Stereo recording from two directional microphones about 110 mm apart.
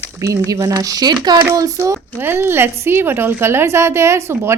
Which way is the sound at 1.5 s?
30° right (ahead or behind).